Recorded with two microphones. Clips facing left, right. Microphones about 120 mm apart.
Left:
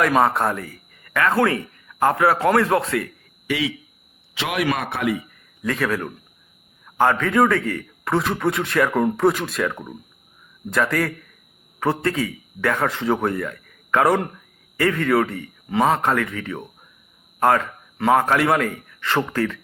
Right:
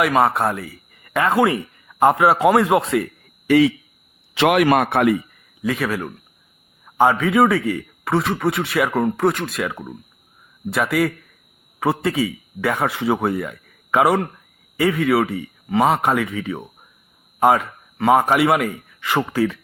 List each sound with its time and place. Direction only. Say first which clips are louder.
0.1 s speech: right 1 dB; 5° right (ahead or behind)
1.0 s speech: right 2 dB; 20° right (ahead or behind)
3.4 s speech: right 10 dB; 45° right (ahead or behind)
4.4 s a man's voice: right 8 dB; 60° right (ahead or behind)
5.6 s speech: right 1 dB; 5° right (ahead or behind)
6.8 s a man's voice: right 2 dB; 15° right (ahead or behind)